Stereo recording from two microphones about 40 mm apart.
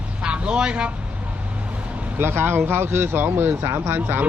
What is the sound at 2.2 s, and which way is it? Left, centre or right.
Speech, right.